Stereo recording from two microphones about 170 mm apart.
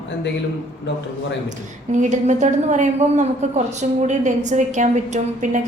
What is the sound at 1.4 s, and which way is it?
A woman's voice, 45° right (ahead or behind).